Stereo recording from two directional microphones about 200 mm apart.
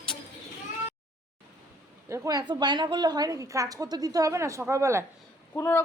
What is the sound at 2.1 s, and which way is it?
A woman's voice, 15° right (ahead or behind).